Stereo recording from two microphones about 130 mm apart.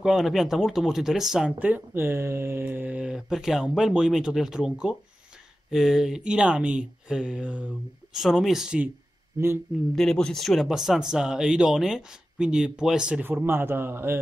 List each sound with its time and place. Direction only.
0.0 s speech: centre (ahead or behind)
9.9 s speech: 5° left (ahead or behind); by 14.2 s 15° right (ahead or behind)